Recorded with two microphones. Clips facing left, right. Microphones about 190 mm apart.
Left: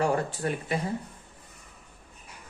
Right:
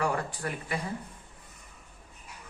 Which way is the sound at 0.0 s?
25° left (ahead or behind).